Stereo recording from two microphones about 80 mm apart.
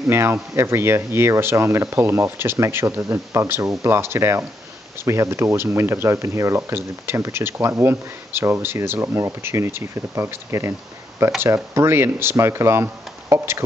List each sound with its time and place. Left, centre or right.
0.1 s speech: right